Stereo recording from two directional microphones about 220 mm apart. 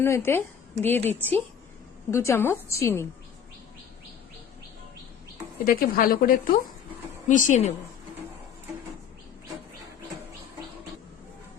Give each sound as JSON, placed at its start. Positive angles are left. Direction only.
{"t": 0.0, "sound": "a woman's voice", "side_deg": 10}
{"t": 5.6, "sound": "a woman's voice", "side_deg": 40}